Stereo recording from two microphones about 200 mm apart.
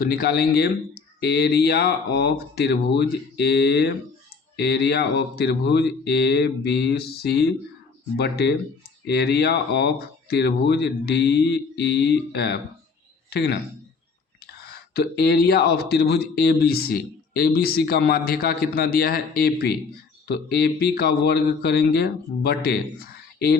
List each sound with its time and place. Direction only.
0.0 s speech: 50° left (ahead or behind)
14.9 s speech: 50° left (ahead or behind)